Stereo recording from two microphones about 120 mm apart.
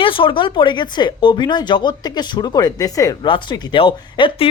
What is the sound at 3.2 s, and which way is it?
Speech, 40° left (ahead or behind).